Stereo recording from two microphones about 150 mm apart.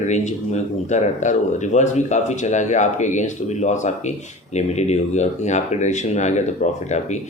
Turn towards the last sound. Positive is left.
turn(degrees=50)  # may be behind; listen again after turning